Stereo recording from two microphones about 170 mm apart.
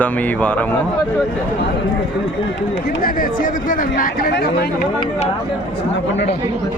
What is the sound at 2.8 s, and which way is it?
Speech, 60° left (ahead or behind).